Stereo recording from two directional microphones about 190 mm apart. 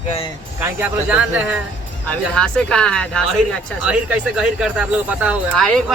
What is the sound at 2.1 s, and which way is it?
A woman's voice, 5° left (ahead or behind).